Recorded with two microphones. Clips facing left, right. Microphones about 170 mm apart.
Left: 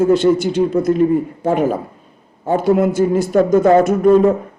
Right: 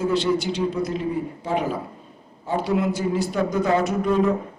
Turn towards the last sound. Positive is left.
turn(degrees=45)  # may be behind; listen again after turning